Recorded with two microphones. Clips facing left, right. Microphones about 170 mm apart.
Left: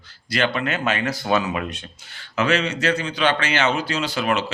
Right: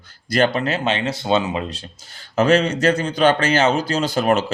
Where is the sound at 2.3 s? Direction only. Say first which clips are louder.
Right 5 dB; 45° right (ahead or behind).